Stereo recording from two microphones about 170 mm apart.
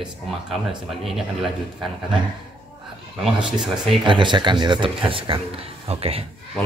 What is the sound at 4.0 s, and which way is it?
Speech, 25° right (ahead or behind).